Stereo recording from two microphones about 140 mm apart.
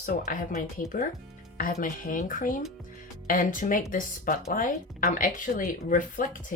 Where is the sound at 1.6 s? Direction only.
75° left (ahead or behind).